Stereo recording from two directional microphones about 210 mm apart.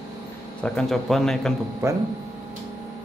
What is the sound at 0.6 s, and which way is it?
Speech, 5° left (ahead or behind).